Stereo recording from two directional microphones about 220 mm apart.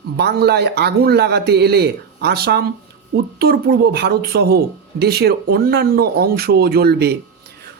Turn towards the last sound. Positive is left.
turn(degrees=-45)  # may be behind; listen again after turning